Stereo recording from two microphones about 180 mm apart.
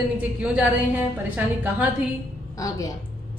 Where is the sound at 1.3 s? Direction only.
10° right (ahead or behind).